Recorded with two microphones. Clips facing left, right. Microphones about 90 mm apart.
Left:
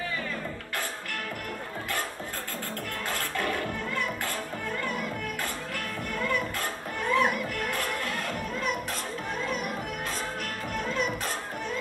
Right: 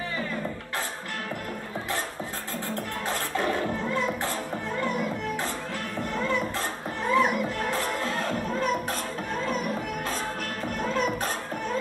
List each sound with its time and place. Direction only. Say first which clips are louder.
3.1 s music: right 3 dB; 20° right (ahead or behind)
6.1 s music: right 2 dB; 25° right (ahead or behind)
10.8 s music: right 3 dB; 40° right (ahead or behind)